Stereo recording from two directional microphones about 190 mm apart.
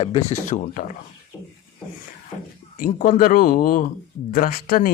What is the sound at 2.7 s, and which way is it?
Speech, 45° left (ahead or behind).